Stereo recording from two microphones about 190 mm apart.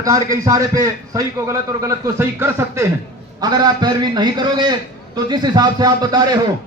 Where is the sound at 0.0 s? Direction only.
15° right (ahead or behind).